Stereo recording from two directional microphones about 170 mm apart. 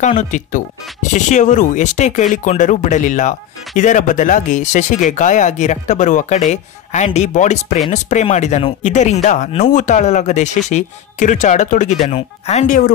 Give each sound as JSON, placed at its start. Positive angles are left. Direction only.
{"t": 0.0, "sound": "speech", "side_deg": 45}